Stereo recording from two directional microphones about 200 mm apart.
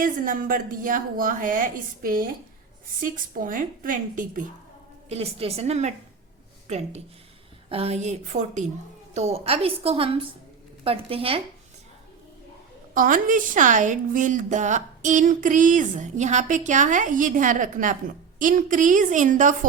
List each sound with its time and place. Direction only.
0.0 s a woman's voice: 45° right (ahead or behind)
5.0 s a woman's voice: 30° right (ahead or behind)
12.9 s a woman's voice: 45° right (ahead or behind)